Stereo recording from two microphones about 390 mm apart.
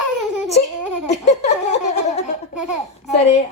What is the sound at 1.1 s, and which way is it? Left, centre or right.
A woman's voice, centre.